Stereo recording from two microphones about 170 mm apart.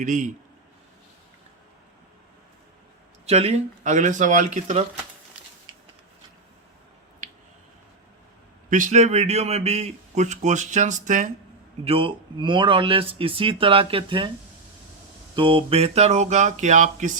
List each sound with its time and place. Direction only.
0.0 s a man's voice: 50° right (ahead or behind)
3.2 s a man's voice: 40° right (ahead or behind)
8.7 s a man's voice: 45° right (ahead or behind)
11.9 s speech: 30° right (ahead or behind)
15.4 s a man's voice: 30° right (ahead or behind); by 17.1 s 45° right (ahead or behind)